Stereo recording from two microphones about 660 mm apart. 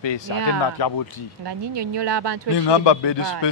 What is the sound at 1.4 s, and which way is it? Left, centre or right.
Speech, right.